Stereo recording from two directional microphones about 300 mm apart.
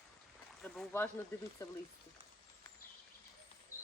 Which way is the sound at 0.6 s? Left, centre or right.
Centre.